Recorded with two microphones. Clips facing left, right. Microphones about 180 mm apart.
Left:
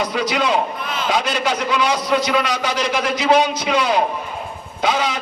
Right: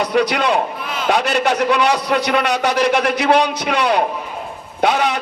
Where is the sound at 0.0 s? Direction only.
60° right (ahead or behind).